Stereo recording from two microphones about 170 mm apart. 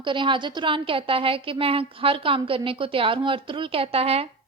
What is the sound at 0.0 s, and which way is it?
A woman's voice, 30° right (ahead or behind).